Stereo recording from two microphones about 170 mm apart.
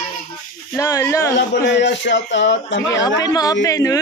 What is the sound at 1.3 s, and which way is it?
Speech, 90° left.